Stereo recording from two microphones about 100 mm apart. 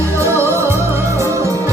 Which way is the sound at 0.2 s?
30° right (ahead or behind).